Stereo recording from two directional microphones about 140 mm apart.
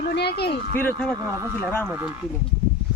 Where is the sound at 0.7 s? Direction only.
10° left (ahead or behind).